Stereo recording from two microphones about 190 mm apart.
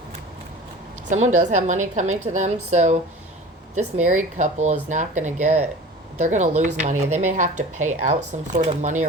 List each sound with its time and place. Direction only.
1.1 s speech: 40° right (ahead or behind)